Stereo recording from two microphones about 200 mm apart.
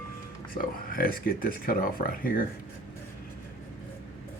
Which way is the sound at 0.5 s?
45° left (ahead or behind).